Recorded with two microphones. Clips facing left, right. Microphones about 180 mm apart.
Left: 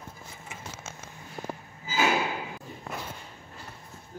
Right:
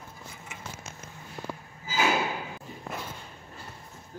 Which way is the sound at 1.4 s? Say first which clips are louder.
Left 1 dB; 50° left (ahead or behind).